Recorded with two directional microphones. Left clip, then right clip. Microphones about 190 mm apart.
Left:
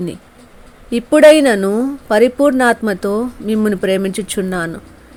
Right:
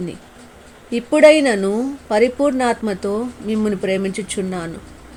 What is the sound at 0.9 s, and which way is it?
Speech, 10° left (ahead or behind).